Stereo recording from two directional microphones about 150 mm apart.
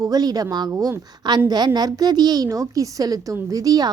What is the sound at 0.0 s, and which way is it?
A woman's voice, 25° right (ahead or behind).